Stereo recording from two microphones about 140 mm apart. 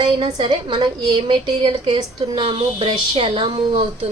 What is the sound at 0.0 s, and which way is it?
A woman's voice, 35° right (ahead or behind).